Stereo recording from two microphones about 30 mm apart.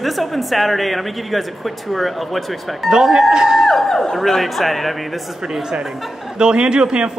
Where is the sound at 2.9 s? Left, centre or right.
Centre.